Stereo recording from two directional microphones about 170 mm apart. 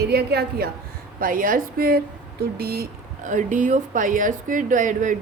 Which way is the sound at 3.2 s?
50° right (ahead or behind).